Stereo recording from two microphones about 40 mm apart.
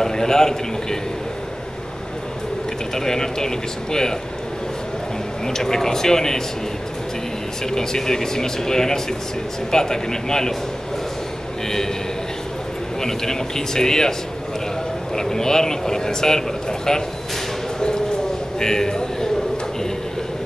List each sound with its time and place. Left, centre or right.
0.0 s a man's voice: centre
2.9 s speech: centre
5.5 s speech: centre
7.7 s speech: centre
13.0 s speech: centre
15.1 s speech: centre
17.7 s a sound: centre